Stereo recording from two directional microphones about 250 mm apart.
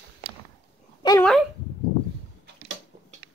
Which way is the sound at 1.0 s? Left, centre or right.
Centre.